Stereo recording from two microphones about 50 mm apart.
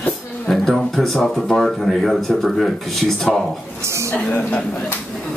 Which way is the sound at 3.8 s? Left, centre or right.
Right.